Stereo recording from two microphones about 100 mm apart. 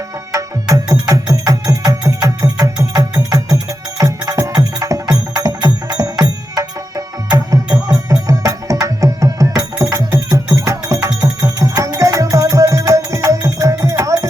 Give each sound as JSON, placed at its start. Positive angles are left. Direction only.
{"t": 0.3, "sound": "music", "side_deg": -35}